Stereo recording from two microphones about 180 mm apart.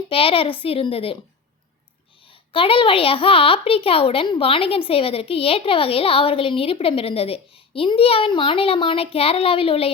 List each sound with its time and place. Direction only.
0.1 s a woman's voice: 30° left (ahead or behind)
2.5 s a woman's voice: 30° left (ahead or behind)